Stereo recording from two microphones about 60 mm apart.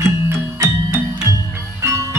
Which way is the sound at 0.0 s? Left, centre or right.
Right.